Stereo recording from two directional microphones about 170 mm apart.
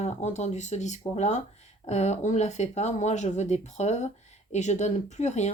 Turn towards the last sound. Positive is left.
turn(degrees=40)  # may be behind; listen again after turning